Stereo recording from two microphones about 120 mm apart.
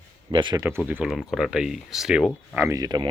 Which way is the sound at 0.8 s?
10° right (ahead or behind).